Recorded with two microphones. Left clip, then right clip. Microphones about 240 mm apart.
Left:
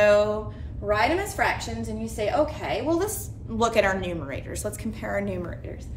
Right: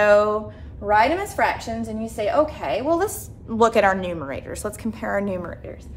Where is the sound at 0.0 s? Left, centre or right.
Right.